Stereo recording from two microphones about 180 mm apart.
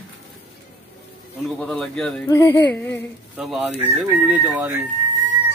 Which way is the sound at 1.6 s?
5° left (ahead or behind).